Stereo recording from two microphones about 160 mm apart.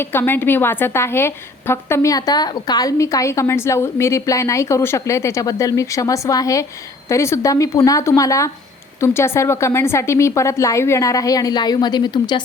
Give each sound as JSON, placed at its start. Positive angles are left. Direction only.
{"t": 0.0, "sound": "a woman's voice", "side_deg": 15}